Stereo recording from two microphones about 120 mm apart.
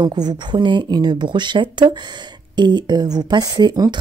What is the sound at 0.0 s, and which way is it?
Speech, 35° right (ahead or behind).